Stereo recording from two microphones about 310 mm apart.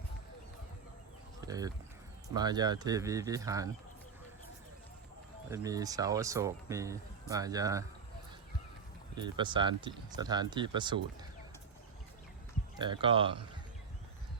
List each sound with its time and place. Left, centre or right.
1.5 s a sound: centre
2.3 s speech: centre
5.5 s speech: centre
9.1 s speech: centre
12.8 s speech: centre